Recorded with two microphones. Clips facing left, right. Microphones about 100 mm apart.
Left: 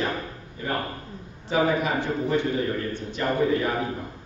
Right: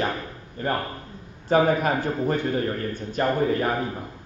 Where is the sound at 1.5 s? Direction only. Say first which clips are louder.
Right 3 dB; 45° right (ahead or behind).